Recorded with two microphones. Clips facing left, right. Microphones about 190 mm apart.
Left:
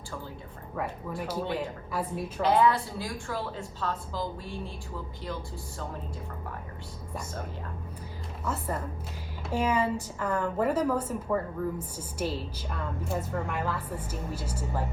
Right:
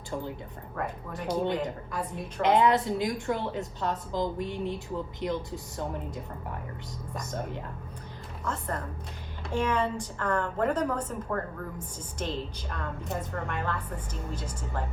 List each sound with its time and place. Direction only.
0.8 s a woman's voice: 5° left (ahead or behind)
2.4 s a woman's voice: 20° right (ahead or behind)
8.4 s a woman's voice: 5° left (ahead or behind)